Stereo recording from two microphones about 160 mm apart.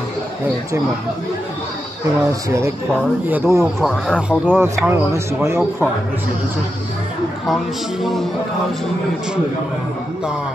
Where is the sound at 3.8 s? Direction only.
Centre (ahead or behind); by 5.4 s 15° right (ahead or behind).